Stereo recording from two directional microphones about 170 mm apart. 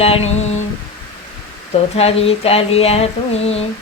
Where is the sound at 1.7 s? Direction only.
35° left (ahead or behind).